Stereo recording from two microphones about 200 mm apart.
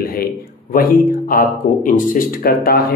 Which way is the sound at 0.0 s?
50° left (ahead or behind).